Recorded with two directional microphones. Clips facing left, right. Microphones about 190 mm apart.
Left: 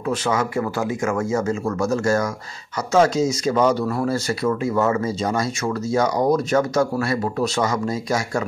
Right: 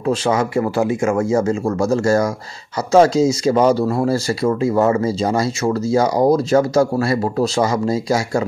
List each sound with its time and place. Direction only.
0.0 s speech: 30° right (ahead or behind)